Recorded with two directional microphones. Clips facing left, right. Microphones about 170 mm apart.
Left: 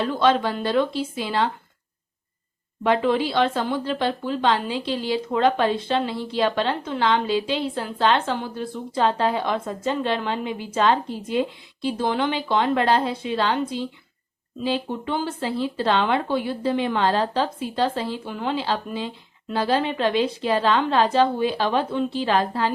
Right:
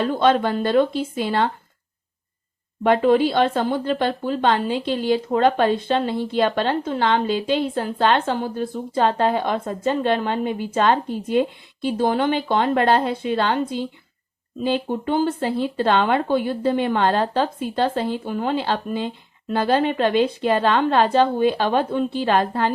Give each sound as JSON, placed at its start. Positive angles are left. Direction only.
{"t": 0.0, "sound": "speech", "side_deg": -50}
{"t": 2.8, "sound": "speech", "side_deg": -45}